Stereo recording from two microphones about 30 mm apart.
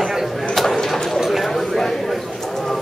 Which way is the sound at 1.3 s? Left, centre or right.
Centre.